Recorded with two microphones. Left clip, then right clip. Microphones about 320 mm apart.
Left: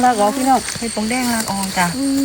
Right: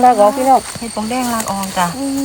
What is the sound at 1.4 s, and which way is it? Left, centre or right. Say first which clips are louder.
Speech: right 2 dB; right.